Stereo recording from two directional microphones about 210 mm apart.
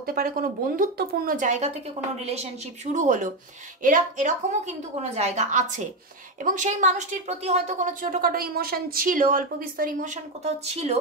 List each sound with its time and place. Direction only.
0.0 s speech: 45° right (ahead or behind)